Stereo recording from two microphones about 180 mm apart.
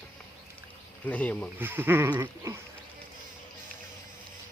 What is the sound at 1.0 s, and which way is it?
Speech, 10° left (ahead or behind).